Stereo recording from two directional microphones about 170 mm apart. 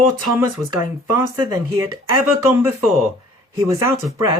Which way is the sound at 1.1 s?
20° right (ahead or behind).